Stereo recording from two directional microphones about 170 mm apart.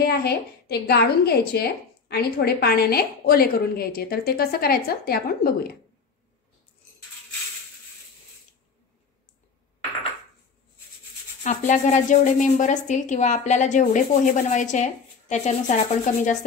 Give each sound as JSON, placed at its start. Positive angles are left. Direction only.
{"t": 0.0, "sound": "a woman's voice", "side_deg": 70}
{"t": 11.4, "sound": "speech", "side_deg": 45}